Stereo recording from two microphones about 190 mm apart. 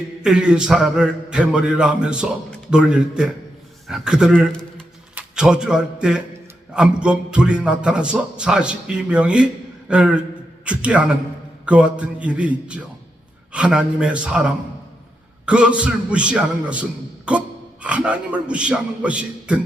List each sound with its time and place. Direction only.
0.2 s a man's voice: 5° right (ahead or behind)